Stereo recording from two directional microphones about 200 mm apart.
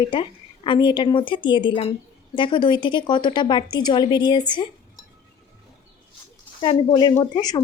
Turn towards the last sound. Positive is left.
turn(degrees=20)  # may be behind; listen again after turning